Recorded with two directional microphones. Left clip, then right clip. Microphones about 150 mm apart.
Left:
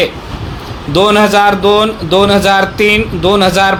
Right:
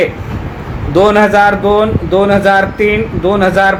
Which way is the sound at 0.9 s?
40° left (ahead or behind).